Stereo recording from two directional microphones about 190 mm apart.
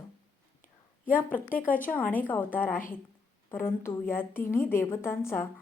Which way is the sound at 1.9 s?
10° left (ahead or behind).